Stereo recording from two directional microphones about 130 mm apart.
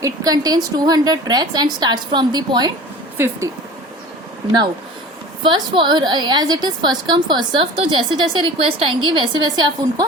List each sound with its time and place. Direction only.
0.0 s a woman's voice: 30° right (ahead or behind)
5.4 s a woman's voice: 40° right (ahead or behind)